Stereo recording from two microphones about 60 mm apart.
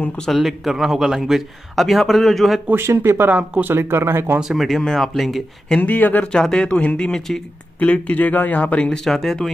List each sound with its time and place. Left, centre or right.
0.4 s a man's voice: centre
2.7 s speech: right
3.3 s speech: right
3.7 s speech: right
4.4 s a man's voice: centre
5.8 s speech: left
6.3 s speech: centre
7.8 s speech: left
9.0 s a man's voice: centre